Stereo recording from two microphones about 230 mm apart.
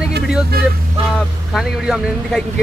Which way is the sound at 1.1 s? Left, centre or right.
Centre.